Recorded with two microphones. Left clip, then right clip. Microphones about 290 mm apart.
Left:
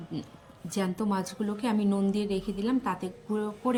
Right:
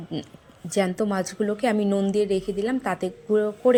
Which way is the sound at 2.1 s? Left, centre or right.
Centre.